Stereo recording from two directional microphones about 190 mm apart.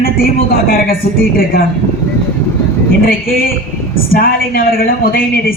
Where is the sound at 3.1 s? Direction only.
50° left (ahead or behind).